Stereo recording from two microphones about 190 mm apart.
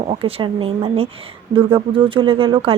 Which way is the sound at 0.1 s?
30° right (ahead or behind).